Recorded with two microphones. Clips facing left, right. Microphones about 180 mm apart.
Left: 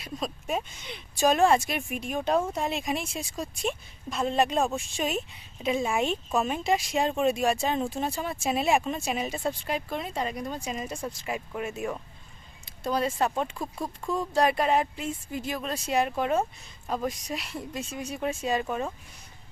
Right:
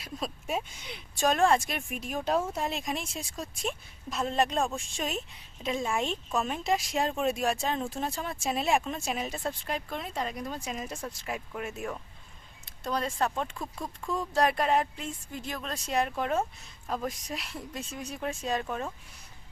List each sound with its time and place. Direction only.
0.0 s speech: 5° right (ahead or behind)
1.2 s speech: 5° left (ahead or behind)